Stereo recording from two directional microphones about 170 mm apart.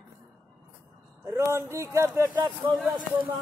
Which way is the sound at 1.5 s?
15° right (ahead or behind).